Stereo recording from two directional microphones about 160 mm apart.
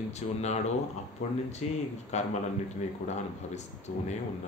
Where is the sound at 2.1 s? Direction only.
45° left (ahead or behind).